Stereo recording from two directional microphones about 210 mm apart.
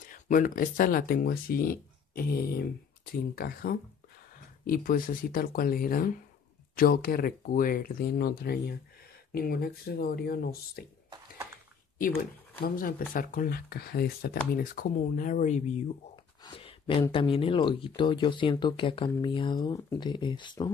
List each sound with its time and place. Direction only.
0.1 s speech: 40° left (ahead or behind)
11.1 s bathtub: 15° right (ahead or behind)
12.2 s speech: 45° left (ahead or behind)
16.4 s a sound: 25° left (ahead or behind)
17.1 s speech: 25° left (ahead or behind)